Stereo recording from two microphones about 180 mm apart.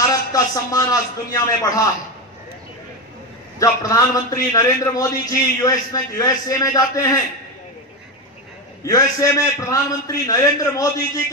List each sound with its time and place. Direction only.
0.0 s a man's voice: 20° left (ahead or behind)
3.5 s a man's voice: 20° left (ahead or behind)
8.8 s a man's voice: 20° left (ahead or behind)